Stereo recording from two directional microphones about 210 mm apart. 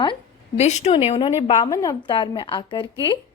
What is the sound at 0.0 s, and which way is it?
A woman's voice, 25° left (ahead or behind).